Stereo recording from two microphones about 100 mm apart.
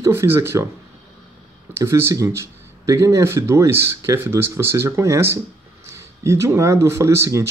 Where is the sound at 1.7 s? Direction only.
25° right (ahead or behind).